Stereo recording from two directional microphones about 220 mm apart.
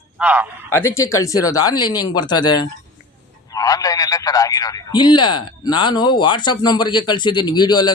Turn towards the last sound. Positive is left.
turn(degrees=20)  # may be behind; listen again after turning